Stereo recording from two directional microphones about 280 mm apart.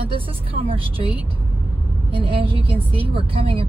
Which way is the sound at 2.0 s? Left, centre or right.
Centre.